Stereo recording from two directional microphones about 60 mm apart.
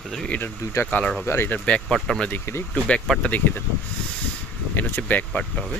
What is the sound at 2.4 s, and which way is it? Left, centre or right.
Speech, left.